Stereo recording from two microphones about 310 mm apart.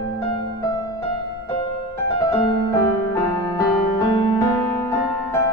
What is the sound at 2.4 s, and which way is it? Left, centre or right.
Music, centre.